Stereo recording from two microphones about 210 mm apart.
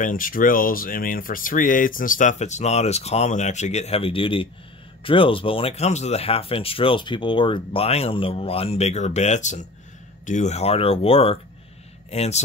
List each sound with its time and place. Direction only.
0.0 s speech: 40° left (ahead or behind)